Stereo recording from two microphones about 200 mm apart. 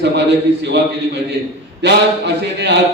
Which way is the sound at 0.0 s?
60° right (ahead or behind).